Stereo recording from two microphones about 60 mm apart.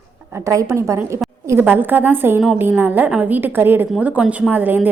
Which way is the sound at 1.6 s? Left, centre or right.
Right.